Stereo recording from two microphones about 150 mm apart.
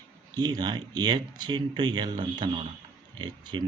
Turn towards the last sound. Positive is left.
turn(degrees=-30)  # may be behind; listen again after turning